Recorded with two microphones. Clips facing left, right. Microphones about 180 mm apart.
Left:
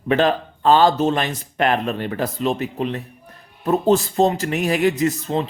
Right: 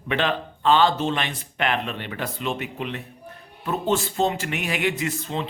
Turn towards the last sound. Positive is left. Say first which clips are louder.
# left 7 dB
turn(degrees=40)  # may be behind; listen again after turning